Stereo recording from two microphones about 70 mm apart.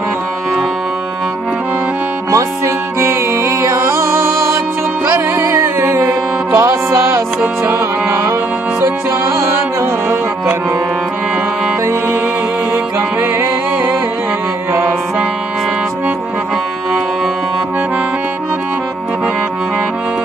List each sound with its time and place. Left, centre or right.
2.3 s music: right
9.8 s music: right
12.7 s music: right